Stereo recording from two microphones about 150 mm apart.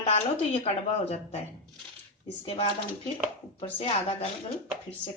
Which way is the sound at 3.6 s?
40° left (ahead or behind).